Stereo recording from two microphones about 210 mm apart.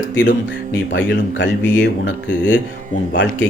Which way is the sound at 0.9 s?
60° left (ahead or behind).